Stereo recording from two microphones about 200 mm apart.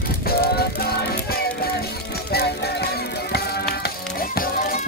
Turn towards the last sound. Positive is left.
turn(degrees=45)  # may be behind; listen again after turning